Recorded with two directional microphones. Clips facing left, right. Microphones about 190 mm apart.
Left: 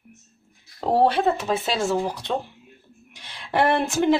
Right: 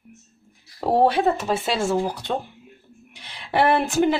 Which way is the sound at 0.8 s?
5° right (ahead or behind).